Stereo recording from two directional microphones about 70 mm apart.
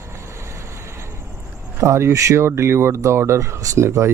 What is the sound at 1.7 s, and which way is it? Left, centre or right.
Speech, right.